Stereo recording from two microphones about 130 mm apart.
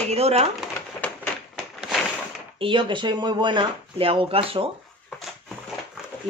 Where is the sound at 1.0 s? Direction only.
10° left (ahead or behind).